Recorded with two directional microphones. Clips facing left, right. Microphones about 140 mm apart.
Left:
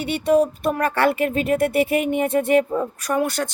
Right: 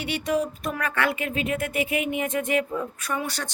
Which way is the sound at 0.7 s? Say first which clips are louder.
Left 7 dB; 35° left (ahead or behind).